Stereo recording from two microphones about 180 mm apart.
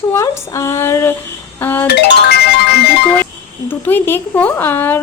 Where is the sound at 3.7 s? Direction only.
10° left (ahead or behind).